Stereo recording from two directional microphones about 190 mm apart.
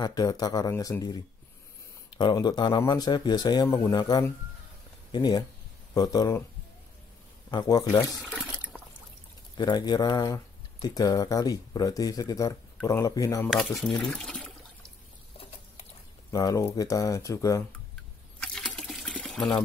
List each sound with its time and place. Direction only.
0.0 s speech: 20° left (ahead or behind)
7.5 s speech: 20° left (ahead or behind)
8.2 s speech: centre (ahead or behind)
9.6 s speech: 20° left (ahead or behind)
13.5 s speech: centre (ahead or behind)
16.3 s speech: 20° left (ahead or behind)
18.4 s water: 5° left (ahead or behind)